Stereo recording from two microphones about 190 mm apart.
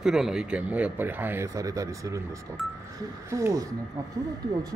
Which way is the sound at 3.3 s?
15° right (ahead or behind).